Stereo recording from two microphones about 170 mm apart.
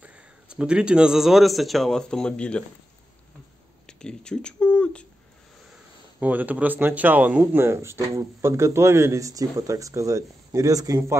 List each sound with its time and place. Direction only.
0.0 s speech: 5° right (ahead or behind)
3.8 s speech: 5° left (ahead or behind)
6.1 s speech: 10° right (ahead or behind)